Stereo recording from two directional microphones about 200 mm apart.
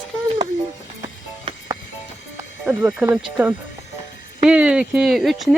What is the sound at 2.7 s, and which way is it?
Speech, 10° right (ahead or behind).